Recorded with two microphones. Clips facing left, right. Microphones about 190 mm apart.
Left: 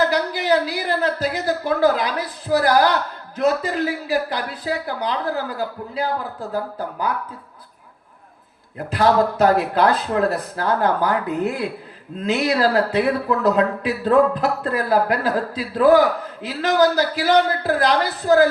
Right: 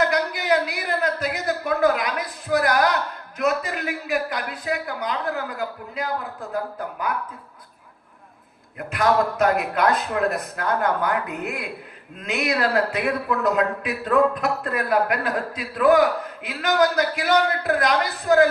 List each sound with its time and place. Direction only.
0.0 s speech: 30° left (ahead or behind)
8.9 s speech: 30° left (ahead or behind)